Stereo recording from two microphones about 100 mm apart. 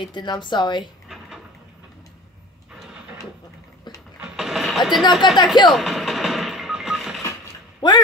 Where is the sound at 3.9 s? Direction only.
5° right (ahead or behind).